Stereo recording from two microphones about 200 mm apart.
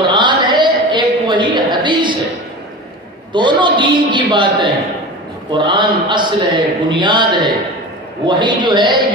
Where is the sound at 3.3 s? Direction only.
25° right (ahead or behind).